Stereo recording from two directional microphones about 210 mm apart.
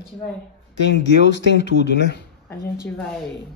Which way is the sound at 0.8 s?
55° left (ahead or behind).